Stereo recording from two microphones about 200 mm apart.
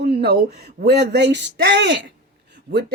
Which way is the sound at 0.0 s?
55° right (ahead or behind).